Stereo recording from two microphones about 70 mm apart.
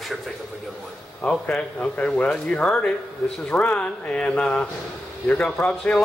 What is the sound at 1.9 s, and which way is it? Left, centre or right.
Speech, centre.